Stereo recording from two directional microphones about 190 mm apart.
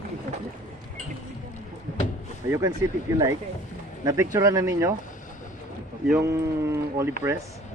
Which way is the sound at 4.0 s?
15° right (ahead or behind).